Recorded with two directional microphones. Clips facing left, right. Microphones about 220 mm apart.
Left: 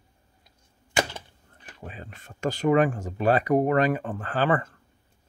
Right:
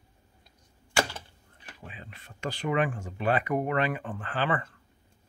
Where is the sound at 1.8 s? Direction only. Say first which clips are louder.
Left 6 dB; 45° left (ahead or behind).